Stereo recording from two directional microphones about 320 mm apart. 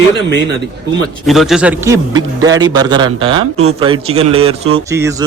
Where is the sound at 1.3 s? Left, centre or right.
Centre.